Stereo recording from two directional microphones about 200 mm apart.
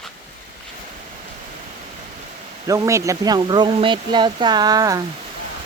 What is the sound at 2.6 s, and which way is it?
Speech, 15° right (ahead or behind).